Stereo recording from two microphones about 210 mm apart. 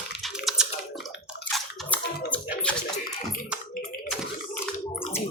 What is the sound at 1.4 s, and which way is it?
Bathtub, 10° left (ahead or behind).